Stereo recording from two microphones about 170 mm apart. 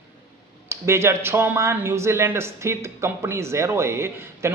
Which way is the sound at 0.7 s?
15° right (ahead or behind).